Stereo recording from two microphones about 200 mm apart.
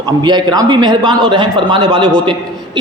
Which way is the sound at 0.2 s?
20° right (ahead or behind).